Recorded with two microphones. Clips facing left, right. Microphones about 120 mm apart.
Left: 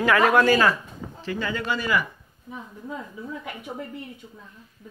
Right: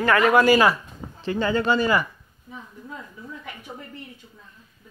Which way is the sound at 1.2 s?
30° right (ahead or behind).